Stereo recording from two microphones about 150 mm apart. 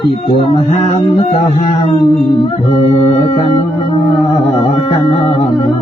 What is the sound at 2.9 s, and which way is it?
Music, 25° left (ahead or behind).